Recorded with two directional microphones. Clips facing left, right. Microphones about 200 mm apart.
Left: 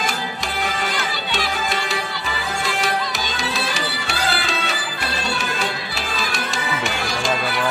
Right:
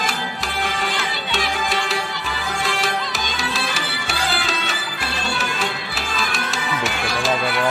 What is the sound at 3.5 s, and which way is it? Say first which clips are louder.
Music: left 1 dB; centre (ahead or behind).